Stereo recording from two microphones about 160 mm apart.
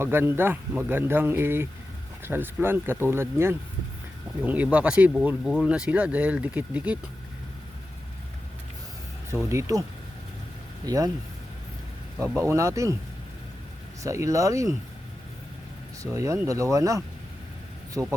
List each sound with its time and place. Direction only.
0.0 s speech: 15° right (ahead or behind)
9.5 s speech: 20° right (ahead or behind)
10.8 s speech: 20° right (ahead or behind)
12.4 s speech: 15° right (ahead or behind)
14.0 s speech: 20° right (ahead or behind)
16.1 s speech: 20° right (ahead or behind)
18.0 s speech: 5° right (ahead or behind)